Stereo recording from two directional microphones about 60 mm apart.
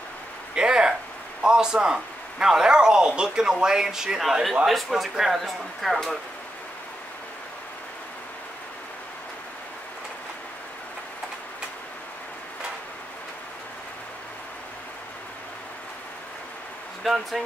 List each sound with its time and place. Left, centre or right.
0.6 s a sound: centre
1.4 s a man's voice: centre
17.0 s speech: centre